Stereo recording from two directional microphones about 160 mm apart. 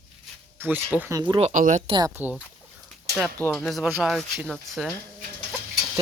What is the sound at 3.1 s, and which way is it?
Speech, 5° left (ahead or behind).